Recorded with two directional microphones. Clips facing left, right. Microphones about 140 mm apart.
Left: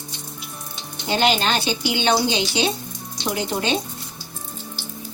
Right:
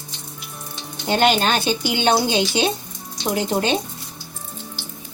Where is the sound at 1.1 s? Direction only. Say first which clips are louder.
Right 2 dB; 50° right (ahead or behind).